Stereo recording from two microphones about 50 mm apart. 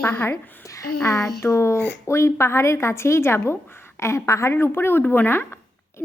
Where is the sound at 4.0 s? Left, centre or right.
Left.